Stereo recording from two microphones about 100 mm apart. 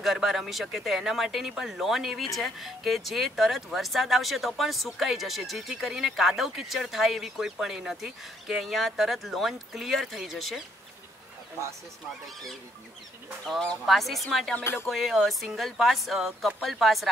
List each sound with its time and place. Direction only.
0.0 s speech: centre (ahead or behind)
13.5 s speech: 5° left (ahead or behind)
14.6 s speech: 25° left (ahead or behind)
14.9 s speech: centre (ahead or behind)